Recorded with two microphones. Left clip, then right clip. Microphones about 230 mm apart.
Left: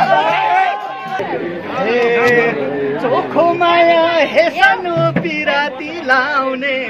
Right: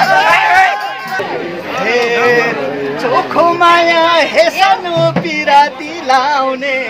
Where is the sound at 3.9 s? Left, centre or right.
Centre.